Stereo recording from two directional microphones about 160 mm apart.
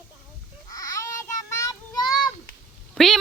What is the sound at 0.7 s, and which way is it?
Child singing, 20° left (ahead or behind).